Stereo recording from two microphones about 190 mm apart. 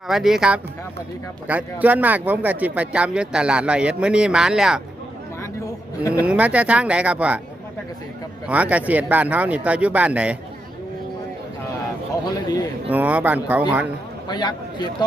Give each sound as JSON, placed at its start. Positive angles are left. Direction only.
{"t": 0.1, "sound": "speech", "side_deg": -5}
{"t": 6.2, "sound": "speech", "side_deg": -5}
{"t": 8.4, "sound": "speech", "side_deg": -5}
{"t": 12.9, "sound": "speech", "side_deg": -10}
{"t": 14.3, "sound": "a man's voice", "side_deg": 20}